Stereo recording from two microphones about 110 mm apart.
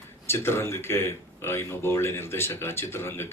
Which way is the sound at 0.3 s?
20° left (ahead or behind).